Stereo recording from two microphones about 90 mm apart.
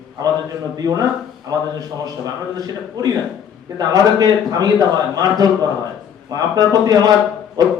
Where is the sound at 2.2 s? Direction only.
45° right (ahead or behind).